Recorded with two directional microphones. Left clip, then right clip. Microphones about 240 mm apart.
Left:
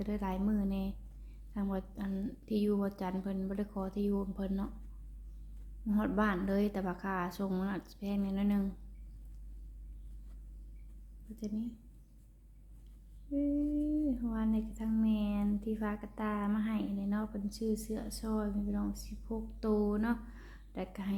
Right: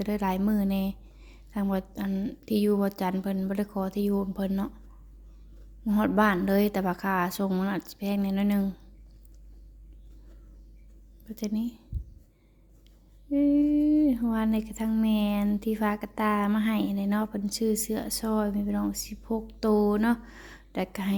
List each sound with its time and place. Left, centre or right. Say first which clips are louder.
0.0 s speech: right 9 dB; right
5.8 s speech: right 9 dB; right
11.3 s speech: right 9 dB; right
13.3 s speech: right 10 dB; right